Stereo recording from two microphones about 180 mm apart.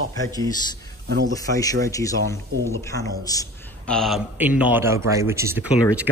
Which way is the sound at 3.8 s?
Centre (ahead or behind).